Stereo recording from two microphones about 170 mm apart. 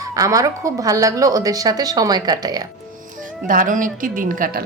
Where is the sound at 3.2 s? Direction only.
50° right (ahead or behind).